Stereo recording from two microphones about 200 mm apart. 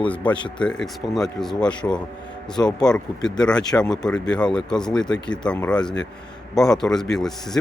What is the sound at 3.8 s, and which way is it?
Speech, 20° left (ahead or behind).